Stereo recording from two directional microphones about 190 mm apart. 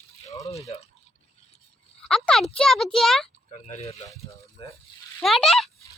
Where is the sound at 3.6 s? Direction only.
35° left (ahead or behind).